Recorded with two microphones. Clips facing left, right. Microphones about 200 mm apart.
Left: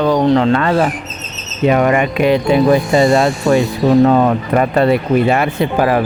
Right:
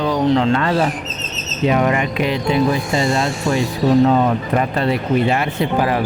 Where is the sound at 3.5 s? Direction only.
60° left (ahead or behind).